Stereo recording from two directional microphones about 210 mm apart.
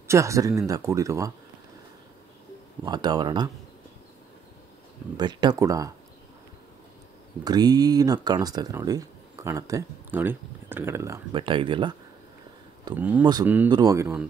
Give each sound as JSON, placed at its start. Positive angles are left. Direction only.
{"t": 0.1, "sound": "speech", "side_deg": -15}
{"t": 2.8, "sound": "speech", "side_deg": -20}
{"t": 5.1, "sound": "speech", "side_deg": -20}
{"t": 7.4, "sound": "speech", "side_deg": -20}
{"t": 11.3, "sound": "speech", "side_deg": -25}
{"t": 12.9, "sound": "speech", "side_deg": -10}
{"t": 13.2, "sound": "speech", "side_deg": -20}